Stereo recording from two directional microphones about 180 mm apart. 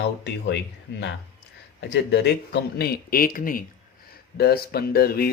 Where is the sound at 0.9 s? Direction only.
75° left (ahead or behind).